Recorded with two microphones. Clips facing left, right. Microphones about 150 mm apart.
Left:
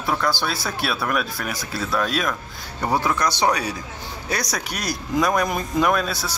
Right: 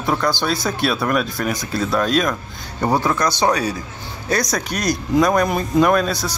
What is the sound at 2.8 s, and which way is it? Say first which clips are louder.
Speech: right 3 dB; 15° right (ahead or behind).